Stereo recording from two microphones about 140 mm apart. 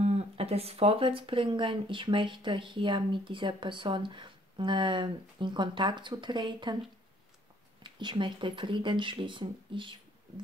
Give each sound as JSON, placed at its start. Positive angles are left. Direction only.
{"t": 0.0, "sound": "speech", "side_deg": -50}
{"t": 7.8, "sound": "speech", "side_deg": -35}